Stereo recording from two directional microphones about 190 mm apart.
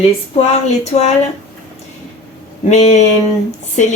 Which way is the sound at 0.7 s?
35° left (ahead or behind).